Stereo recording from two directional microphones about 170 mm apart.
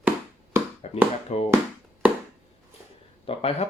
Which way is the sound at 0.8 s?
40° left (ahead or behind).